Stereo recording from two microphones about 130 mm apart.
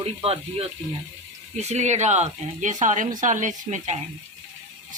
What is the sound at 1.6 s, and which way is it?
Speech, 60° right (ahead or behind).